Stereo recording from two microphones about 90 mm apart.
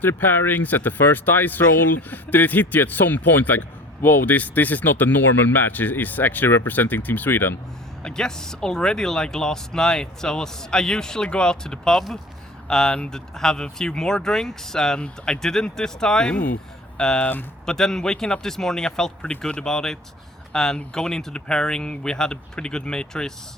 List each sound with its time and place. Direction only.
0.0 s speech: 20° left (ahead or behind)
8.0 s speech: 5° left (ahead or behind)